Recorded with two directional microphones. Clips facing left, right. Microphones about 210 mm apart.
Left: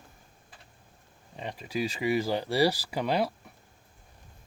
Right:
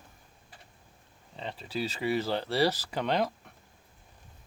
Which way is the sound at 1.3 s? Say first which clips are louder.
Left 2 dB; 15° left (ahead or behind).